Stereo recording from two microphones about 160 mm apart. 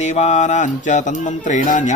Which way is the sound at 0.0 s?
45° left (ahead or behind).